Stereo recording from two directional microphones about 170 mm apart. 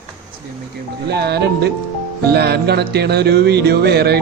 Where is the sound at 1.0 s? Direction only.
75° right (ahead or behind).